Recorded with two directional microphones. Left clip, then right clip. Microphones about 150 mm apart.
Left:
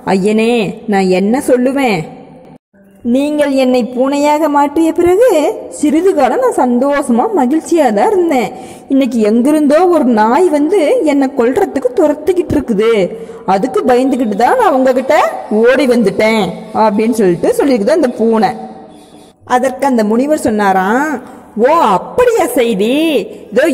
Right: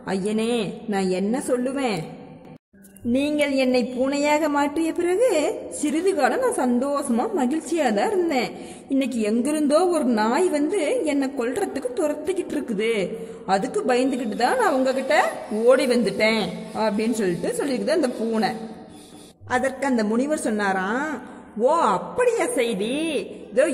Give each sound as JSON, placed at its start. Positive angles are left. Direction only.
{"t": 0.0, "sound": "a woman's voice", "side_deg": 35}
{"t": 3.1, "sound": "a woman's voice", "side_deg": 25}
{"t": 19.5, "sound": "a woman's voice", "side_deg": 30}